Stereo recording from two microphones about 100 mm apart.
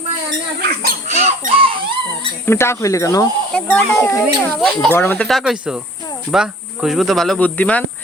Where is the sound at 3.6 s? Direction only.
15° left (ahead or behind).